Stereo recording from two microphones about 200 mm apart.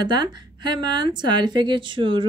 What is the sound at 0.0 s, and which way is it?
Speech, 20° right (ahead or behind).